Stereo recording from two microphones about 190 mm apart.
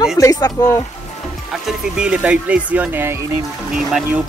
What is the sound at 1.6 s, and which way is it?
Speech, 5° right (ahead or behind).